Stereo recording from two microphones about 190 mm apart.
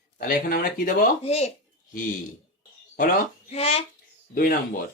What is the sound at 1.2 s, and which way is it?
Speech, 35° left (ahead or behind).